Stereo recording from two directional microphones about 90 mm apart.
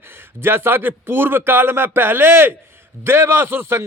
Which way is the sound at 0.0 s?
25° right (ahead or behind).